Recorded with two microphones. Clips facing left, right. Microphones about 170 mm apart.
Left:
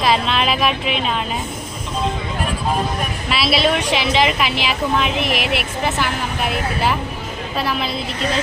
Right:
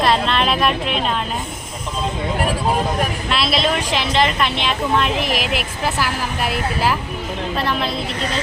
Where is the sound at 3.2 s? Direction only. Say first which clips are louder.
Left 4 dB; 5° left (ahead or behind).